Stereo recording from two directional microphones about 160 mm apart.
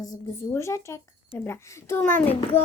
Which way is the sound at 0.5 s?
15° left (ahead or behind).